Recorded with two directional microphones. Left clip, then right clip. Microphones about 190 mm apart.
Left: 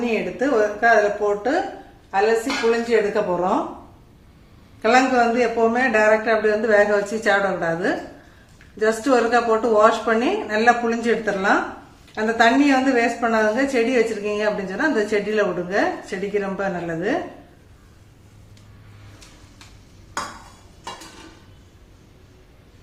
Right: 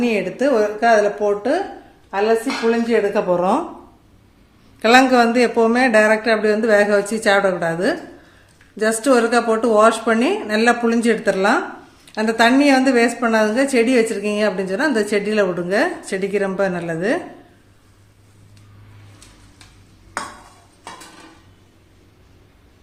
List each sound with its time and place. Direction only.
0.0 s a woman's voice: 60° right (ahead or behind)
2.0 s a woman's voice: 45° right (ahead or behind)
4.8 s a woman's voice: 60° right (ahead or behind)